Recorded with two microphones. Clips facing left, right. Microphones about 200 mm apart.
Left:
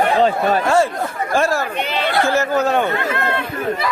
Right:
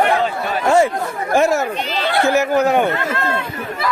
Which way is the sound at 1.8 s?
60° left (ahead or behind).